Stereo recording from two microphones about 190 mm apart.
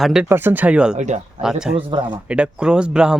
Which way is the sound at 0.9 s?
40° right (ahead or behind).